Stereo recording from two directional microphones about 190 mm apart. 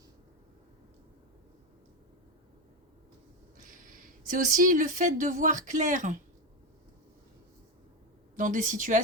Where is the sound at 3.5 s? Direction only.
45° right (ahead or behind).